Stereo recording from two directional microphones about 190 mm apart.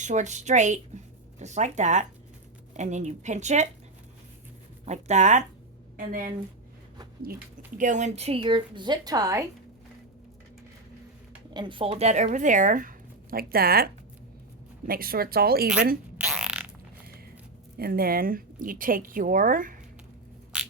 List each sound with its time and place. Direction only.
0.0 s a woman's voice: 40° right (ahead or behind)
4.9 s a woman's voice: 40° right (ahead or behind)
7.8 s a woman's voice: 40° right (ahead or behind); by 9.4 s 20° right (ahead or behind)
11.5 s a woman's voice: 25° right (ahead or behind); by 15.7 s 55° right (ahead or behind)
16.1 s fart: 5° right (ahead or behind)
17.7 s a woman's voice: 50° right (ahead or behind)